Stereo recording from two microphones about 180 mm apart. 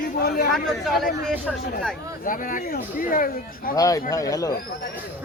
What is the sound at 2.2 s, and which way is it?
Speech, 50° left (ahead or behind).